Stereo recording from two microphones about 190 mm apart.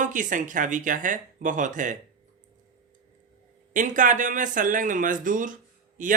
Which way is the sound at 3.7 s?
45° right (ahead or behind).